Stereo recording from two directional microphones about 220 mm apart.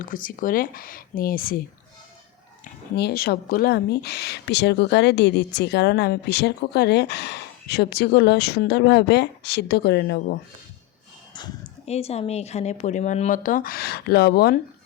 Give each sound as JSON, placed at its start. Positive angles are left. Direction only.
{"t": 0.0, "sound": "speech", "side_deg": 40}
{"t": 2.9, "sound": "speech", "side_deg": 50}
{"t": 11.3, "sound": "a sound", "side_deg": 20}
{"t": 11.9, "sound": "speech", "side_deg": 30}